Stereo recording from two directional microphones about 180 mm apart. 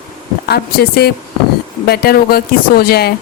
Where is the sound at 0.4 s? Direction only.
65° left (ahead or behind).